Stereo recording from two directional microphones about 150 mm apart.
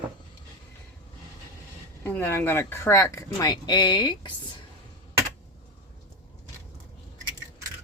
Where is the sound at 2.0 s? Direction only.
15° left (ahead or behind); by 4.3 s 30° left (ahead or behind).